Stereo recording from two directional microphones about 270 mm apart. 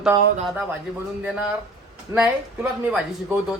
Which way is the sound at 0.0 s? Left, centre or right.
Centre.